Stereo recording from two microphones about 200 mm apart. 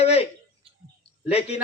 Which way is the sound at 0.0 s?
30° left (ahead or behind).